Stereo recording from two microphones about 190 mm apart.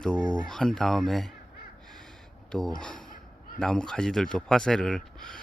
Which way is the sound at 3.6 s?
5° left (ahead or behind).